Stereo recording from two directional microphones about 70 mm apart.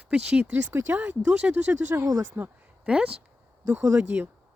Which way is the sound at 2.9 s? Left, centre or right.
Centre.